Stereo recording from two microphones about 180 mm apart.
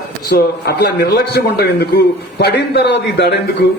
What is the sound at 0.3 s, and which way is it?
A man's voice, 65° left (ahead or behind).